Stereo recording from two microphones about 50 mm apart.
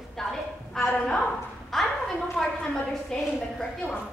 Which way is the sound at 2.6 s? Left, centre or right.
Centre.